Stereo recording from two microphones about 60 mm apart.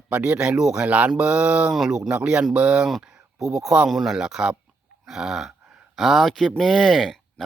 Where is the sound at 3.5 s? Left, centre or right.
Centre.